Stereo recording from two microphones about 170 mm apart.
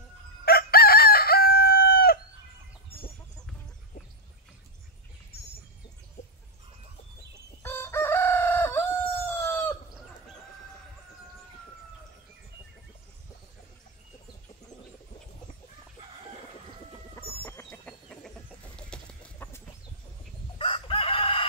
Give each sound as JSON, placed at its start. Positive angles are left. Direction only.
{"t": 0.5, "sound": "chicken", "side_deg": 65}
{"t": 7.6, "sound": "chicken", "side_deg": 15}
{"t": 17.1, "sound": "chicken", "side_deg": 15}
{"t": 20.5, "sound": "chicken", "side_deg": 30}